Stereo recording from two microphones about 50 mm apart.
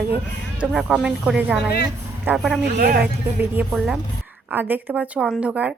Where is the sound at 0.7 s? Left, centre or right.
Centre.